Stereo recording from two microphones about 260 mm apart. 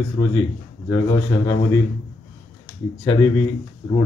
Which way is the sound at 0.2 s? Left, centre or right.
Centre.